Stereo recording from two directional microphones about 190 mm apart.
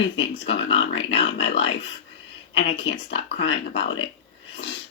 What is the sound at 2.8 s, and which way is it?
Speech, 65° left (ahead or behind).